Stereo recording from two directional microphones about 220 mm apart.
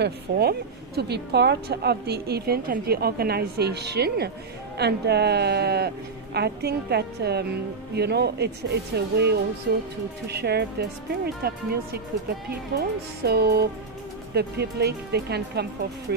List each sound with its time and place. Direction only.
0.0 s a woman's voice: 45° right (ahead or behind)